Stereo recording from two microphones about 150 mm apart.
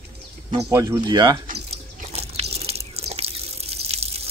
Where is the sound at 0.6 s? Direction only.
15° right (ahead or behind).